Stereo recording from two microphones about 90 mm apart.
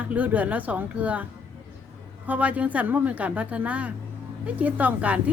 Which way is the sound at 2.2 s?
15° right (ahead or behind).